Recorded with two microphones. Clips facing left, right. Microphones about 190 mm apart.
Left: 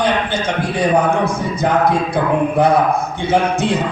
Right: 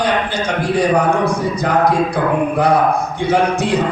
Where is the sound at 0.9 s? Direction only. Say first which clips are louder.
Even; 25° left (ahead or behind).